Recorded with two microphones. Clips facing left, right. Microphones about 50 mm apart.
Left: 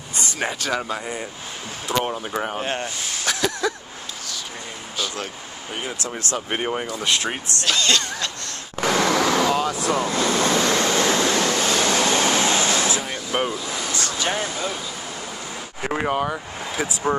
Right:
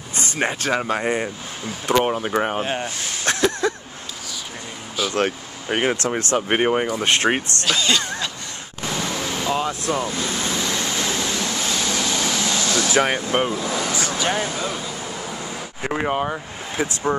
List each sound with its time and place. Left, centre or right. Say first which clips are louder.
0.1 s speech: right 3 dB; right
2.0 s speech: right 4 dB; right
2.6 s speech: right 1 dB; centre
3.3 s a sound: right 3 dB; right
5.1 s speech: right 9 dB; right
7.0 s speech: right 5 dB; right
7.7 s speech: even; centre
8.8 s a sound: left 7 dB; left
9.5 s air conditioning: left 1 dB; right
10.0 s vehicle: left 5 dB; left
13.1 s speech: right 5 dB; right
13.6 s speech: right 5 dB; right
13.9 s speech: right 2 dB; centre
15.8 s speech: even; centre